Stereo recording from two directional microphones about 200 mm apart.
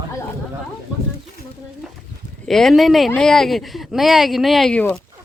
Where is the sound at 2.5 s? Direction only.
Centre (ahead or behind).